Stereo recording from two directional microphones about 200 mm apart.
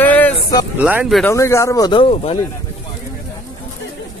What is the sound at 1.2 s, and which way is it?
Speech, 15° left (ahead or behind).